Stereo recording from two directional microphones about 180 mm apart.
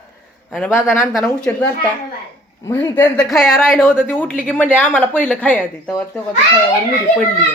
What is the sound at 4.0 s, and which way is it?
Speech, 10° left (ahead or behind).